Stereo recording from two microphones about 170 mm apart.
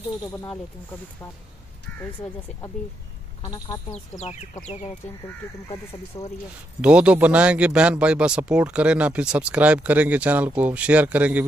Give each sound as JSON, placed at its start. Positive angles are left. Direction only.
{"t": 1.9, "sound": "speech", "side_deg": 10}
{"t": 4.2, "sound": "speech", "side_deg": 40}
{"t": 6.1, "sound": "speech", "side_deg": 25}
{"t": 6.8, "sound": "speech", "side_deg": -5}